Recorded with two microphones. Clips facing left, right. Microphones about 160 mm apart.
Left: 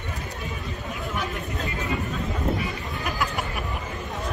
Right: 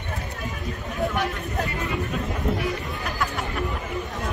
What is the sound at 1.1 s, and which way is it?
Speech, 70° right (ahead or behind).